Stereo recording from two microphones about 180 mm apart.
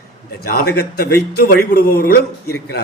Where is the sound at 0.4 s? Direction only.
60° left (ahead or behind).